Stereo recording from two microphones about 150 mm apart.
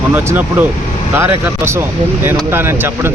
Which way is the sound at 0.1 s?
15° right (ahead or behind).